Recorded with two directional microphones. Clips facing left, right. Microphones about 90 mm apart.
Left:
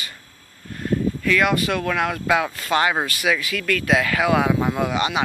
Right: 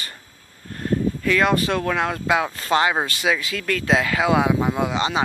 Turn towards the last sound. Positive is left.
turn(degrees=-25)  # may be behind; listen again after turning